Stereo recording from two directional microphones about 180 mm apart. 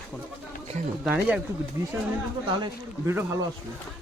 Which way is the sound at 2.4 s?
25° right (ahead or behind).